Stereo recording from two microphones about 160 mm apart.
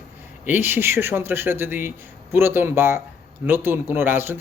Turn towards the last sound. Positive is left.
turn(degrees=-15)  # may be behind; listen again after turning